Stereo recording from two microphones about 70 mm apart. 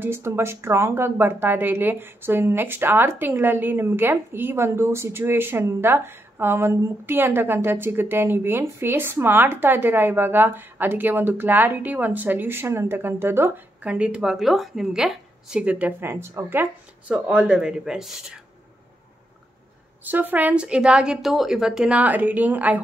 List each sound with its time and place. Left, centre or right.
0.0 s a woman's voice: right
13.8 s speech: centre
14.3 s a woman's voice: centre
15.6 s a woman's voice: centre
16.0 s a woman's voice: right
17.1 s speech: centre
20.1 s speech: right; by 21.9 s centre
21.9 s a woman's voice: right